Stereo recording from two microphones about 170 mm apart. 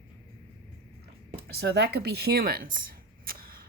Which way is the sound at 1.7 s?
70° right (ahead or behind).